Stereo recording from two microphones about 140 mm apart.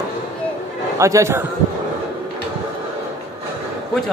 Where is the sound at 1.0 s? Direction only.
20° right (ahead or behind).